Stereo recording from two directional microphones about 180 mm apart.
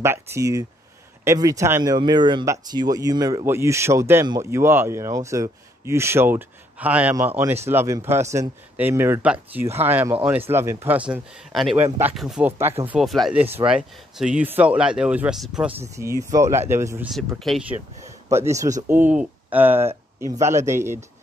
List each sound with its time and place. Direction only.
0.0 s speech: 15° right (ahead or behind)
11.1 s speech: centre (ahead or behind)
12.9 s speech: centre (ahead or behind)
16.3 s speech: 20° right (ahead or behind)
17.4 s speech: centre (ahead or behind)
18.0 s speech: 15° right (ahead or behind)